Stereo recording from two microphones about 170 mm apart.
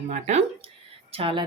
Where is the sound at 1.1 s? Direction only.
35° right (ahead or behind).